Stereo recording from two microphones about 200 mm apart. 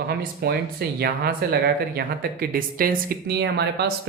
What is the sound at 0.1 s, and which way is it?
Speech, 50° right (ahead or behind).